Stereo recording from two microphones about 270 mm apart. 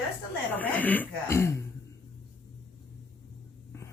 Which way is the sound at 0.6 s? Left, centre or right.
Centre.